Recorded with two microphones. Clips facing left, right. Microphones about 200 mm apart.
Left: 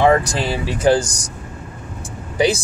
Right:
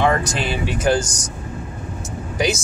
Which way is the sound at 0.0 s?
35° left (ahead or behind).